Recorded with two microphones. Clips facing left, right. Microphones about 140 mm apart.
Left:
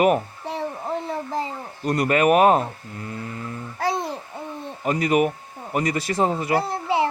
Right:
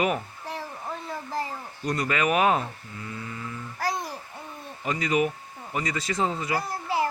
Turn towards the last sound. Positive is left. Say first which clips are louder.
# left 5 dB
turn(degrees=25)  # may be behind; listen again after turning